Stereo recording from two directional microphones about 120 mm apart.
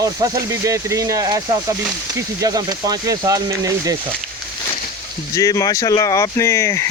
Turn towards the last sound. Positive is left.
turn(degrees=25)  # may be behind; listen again after turning